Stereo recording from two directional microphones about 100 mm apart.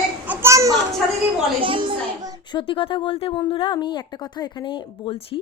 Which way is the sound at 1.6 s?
60° right (ahead or behind).